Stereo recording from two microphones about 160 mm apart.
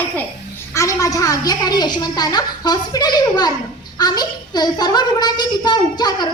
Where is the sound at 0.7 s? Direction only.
20° left (ahead or behind).